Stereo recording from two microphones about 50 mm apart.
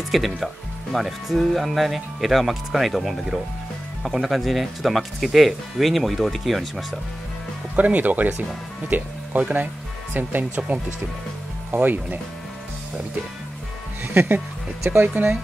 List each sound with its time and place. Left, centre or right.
0.1 s speech: centre
7.7 s speech: right
14.0 s speech: right